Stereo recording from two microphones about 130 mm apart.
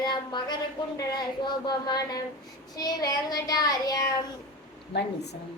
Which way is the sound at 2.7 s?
30° left (ahead or behind).